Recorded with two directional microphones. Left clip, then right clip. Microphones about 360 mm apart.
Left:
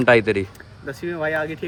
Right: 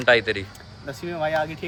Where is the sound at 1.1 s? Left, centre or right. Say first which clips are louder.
Even; right.